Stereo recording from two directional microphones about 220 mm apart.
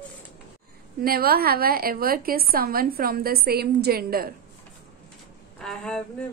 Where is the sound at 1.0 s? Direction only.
45° right (ahead or behind).